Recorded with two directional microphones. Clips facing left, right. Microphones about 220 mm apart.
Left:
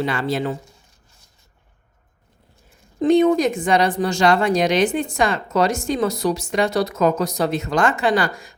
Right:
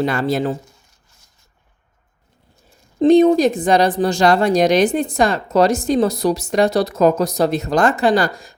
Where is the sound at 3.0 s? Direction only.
35° right (ahead or behind).